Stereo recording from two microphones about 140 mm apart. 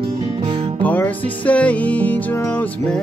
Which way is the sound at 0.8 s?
10° left (ahead or behind).